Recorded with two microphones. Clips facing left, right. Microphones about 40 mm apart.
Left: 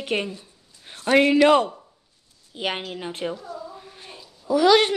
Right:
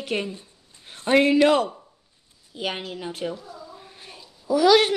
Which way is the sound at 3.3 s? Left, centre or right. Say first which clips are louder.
Left 4 dB; centre.